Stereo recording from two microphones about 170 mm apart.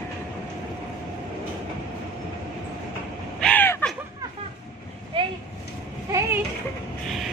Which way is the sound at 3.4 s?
10° left (ahead or behind).